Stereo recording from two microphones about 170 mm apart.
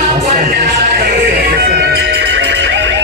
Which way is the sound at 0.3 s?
60° right (ahead or behind).